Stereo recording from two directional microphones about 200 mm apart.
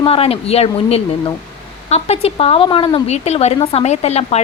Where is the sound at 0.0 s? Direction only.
30° left (ahead or behind).